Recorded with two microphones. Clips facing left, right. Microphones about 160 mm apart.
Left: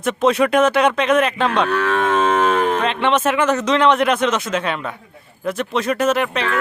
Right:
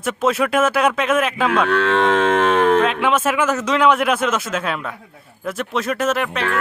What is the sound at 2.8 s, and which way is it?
Speech, 5° right (ahead or behind).